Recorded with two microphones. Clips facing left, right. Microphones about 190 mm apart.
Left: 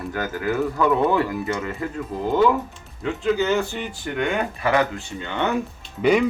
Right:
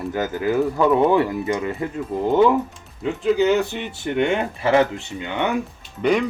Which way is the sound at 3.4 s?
15° right (ahead or behind).